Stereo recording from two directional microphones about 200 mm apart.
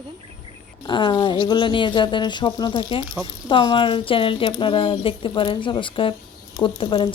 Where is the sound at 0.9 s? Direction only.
25° left (ahead or behind).